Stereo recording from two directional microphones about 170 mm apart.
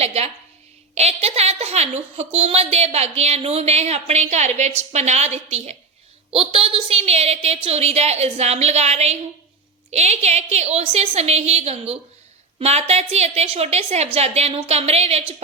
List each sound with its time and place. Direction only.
0.0 s a woman's voice: 40° right (ahead or behind)